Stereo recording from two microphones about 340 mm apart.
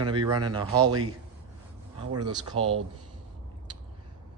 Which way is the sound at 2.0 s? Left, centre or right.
Right.